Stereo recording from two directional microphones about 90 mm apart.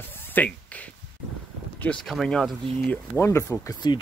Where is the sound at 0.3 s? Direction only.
20° left (ahead or behind).